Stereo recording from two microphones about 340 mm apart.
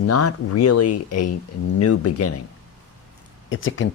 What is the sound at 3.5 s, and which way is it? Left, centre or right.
Speech, left.